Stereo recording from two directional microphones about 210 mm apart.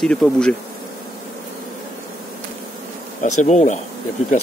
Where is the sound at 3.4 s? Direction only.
35° left (ahead or behind).